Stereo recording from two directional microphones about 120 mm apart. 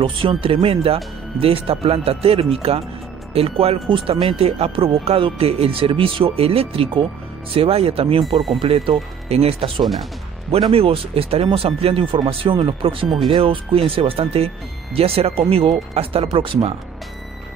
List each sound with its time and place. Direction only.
0.0 s speech: 45° right (ahead or behind)
9.3 s speech: 55° right (ahead or behind)